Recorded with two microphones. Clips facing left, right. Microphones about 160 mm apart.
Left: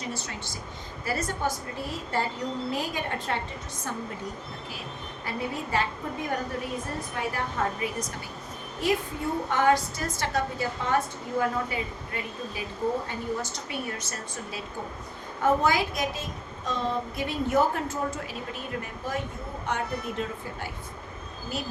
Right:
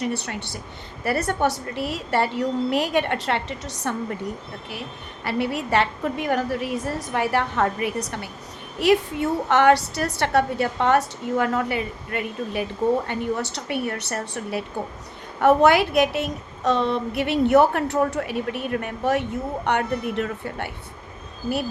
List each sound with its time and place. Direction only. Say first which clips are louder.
0.0 s a woman's voice: right 8 dB; 65° right (ahead or behind)
5.2 s a woman's voice: right 8 dB; 75° right (ahead or behind)
8.8 s a woman's voice: right 8 dB; 75° right (ahead or behind)